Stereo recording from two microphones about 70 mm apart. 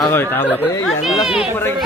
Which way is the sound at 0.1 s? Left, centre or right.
Left.